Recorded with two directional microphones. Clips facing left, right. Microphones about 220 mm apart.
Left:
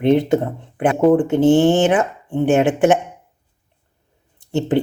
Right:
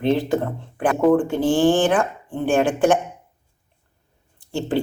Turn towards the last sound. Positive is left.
turn(degrees=20)  # may be behind; listen again after turning